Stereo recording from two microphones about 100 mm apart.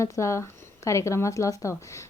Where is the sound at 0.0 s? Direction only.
30° left (ahead or behind).